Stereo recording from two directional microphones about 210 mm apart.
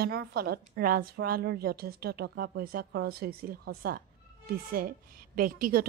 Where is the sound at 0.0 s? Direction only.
50° right (ahead or behind).